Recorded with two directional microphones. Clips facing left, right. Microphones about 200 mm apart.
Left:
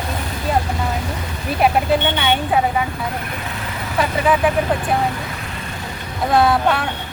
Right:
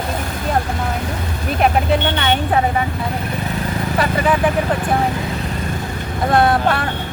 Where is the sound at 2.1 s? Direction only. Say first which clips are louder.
Right 1 dB; 10° left (ahead or behind).